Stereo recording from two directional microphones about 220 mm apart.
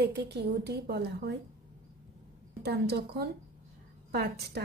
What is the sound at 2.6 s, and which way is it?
A woman's voice, 50° right (ahead or behind).